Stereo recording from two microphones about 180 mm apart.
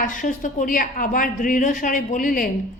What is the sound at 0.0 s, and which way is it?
A woman's voice, 45° left (ahead or behind).